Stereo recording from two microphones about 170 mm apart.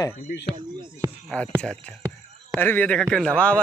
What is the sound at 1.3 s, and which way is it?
Speech, 5° left (ahead or behind).